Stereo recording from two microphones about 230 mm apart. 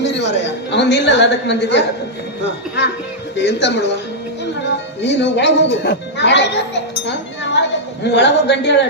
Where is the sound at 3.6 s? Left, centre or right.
Left.